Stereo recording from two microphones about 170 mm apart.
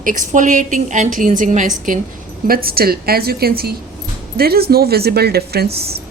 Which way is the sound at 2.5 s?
60° right (ahead or behind).